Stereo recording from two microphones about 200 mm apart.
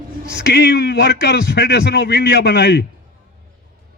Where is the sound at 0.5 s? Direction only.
55° left (ahead or behind).